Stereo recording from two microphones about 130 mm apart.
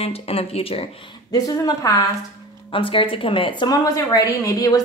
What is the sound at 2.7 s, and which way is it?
Speech, 40° left (ahead or behind).